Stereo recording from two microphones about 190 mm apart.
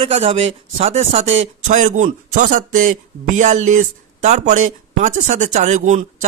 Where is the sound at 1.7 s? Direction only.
40° right (ahead or behind).